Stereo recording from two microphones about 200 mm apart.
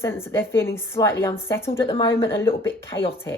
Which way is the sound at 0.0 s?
10° left (ahead or behind).